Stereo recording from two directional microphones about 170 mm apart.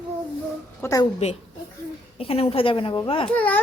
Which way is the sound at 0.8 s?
20° left (ahead or behind).